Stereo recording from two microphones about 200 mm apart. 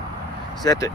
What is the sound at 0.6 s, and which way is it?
Speech, 15° left (ahead or behind).